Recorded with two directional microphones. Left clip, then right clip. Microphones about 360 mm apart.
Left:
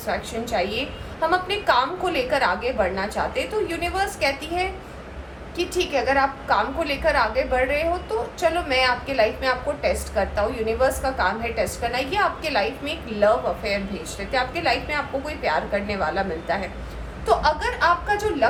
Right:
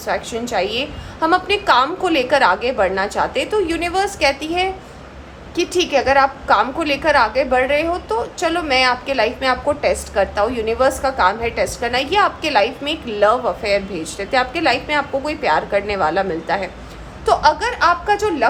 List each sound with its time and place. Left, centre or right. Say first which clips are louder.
0.1 s a woman's voice: right 5 dB; right